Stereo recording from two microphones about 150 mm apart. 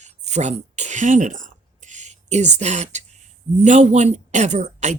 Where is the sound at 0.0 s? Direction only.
50° right (ahead or behind).